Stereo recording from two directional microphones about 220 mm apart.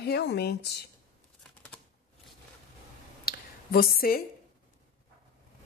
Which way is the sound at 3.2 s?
45° left (ahead or behind).